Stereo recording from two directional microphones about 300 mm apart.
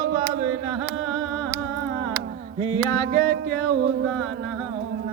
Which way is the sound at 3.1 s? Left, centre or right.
Right.